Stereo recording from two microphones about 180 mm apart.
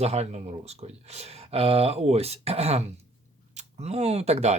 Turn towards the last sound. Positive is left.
turn(degrees=-40)  # may be behind; listen again after turning